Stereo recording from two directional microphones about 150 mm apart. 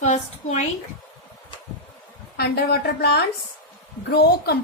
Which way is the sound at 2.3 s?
90° left.